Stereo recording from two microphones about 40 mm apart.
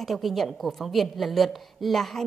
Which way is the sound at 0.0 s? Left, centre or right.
Centre.